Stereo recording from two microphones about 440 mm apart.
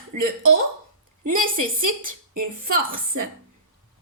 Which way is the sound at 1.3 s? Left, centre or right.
Right.